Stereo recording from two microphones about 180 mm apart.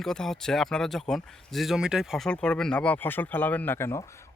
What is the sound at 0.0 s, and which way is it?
Speech, 5° left (ahead or behind).